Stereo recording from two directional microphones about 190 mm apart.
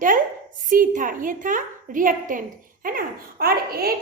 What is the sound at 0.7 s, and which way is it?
A woman's voice, 45° right (ahead or behind).